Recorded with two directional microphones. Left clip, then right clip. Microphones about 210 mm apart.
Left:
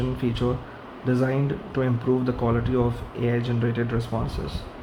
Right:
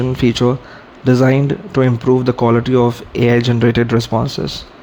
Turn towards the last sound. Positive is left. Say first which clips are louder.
# right 12 dB
turn(degrees=-50)  # may be behind; listen again after turning